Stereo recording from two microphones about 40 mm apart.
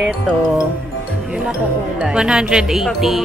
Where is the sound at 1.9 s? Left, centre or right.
Right; by 3.2 s centre.